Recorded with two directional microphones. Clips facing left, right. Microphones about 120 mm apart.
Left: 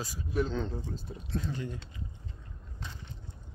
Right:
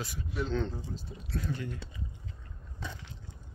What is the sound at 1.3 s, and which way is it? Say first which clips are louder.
Speech: left 1 dB; 20° left (ahead or behind).